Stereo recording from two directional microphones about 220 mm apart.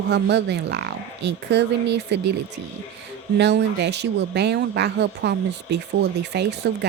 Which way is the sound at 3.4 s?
50° right (ahead or behind).